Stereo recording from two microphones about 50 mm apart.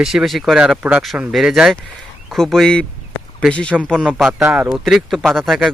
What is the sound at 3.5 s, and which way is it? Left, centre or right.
Speech, centre.